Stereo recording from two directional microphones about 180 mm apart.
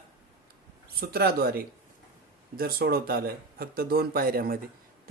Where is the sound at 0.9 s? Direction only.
60° right (ahead or behind).